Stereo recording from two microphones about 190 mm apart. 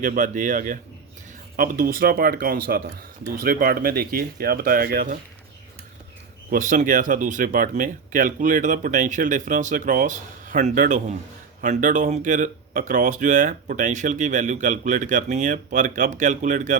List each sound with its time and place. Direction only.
0.0 s speech: 45° right (ahead or behind)
6.5 s speech: 45° right (ahead or behind)